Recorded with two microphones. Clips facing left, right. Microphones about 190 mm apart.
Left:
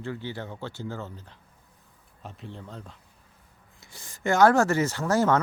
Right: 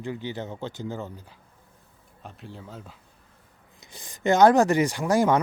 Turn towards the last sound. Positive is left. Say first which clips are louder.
# right 2 dB
turn(degrees=-15)  # may be behind; listen again after turning